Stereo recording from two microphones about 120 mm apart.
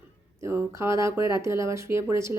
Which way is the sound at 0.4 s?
20° right (ahead or behind).